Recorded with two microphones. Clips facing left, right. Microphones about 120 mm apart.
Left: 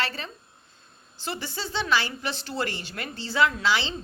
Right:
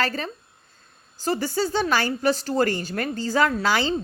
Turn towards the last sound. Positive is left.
turn(degrees=-45)  # may be behind; listen again after turning